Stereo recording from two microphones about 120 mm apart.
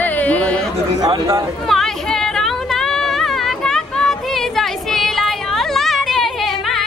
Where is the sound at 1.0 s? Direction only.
30° right (ahead or behind).